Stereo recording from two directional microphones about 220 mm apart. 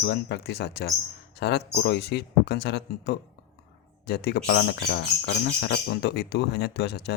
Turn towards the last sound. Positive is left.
turn(degrees=45)  # may be behind; listen again after turning